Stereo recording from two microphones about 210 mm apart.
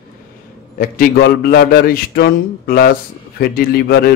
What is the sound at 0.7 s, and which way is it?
A man's voice, 45° left (ahead or behind).